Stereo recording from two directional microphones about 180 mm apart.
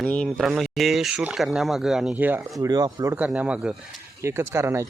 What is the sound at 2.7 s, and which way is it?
Speech, 20° right (ahead or behind).